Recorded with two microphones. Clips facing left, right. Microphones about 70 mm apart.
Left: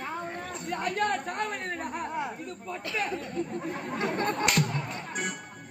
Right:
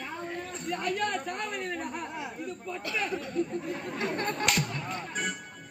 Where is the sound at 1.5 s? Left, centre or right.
Left.